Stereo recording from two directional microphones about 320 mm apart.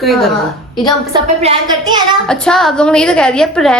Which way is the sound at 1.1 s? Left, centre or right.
Centre.